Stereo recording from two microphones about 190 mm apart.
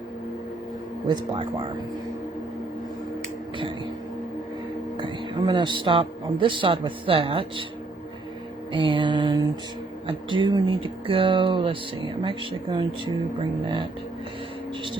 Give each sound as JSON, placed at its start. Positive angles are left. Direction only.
{"t": 1.0, "sound": "speech", "side_deg": -25}
{"t": 4.9, "sound": "speech", "side_deg": -25}
{"t": 8.7, "sound": "speech", "side_deg": -25}